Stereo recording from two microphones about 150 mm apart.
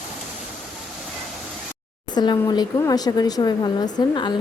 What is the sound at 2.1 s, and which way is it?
Speech, 30° left (ahead or behind).